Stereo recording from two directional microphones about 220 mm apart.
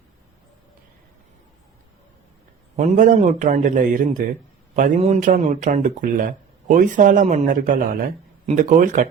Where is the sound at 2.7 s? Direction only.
30° right (ahead or behind).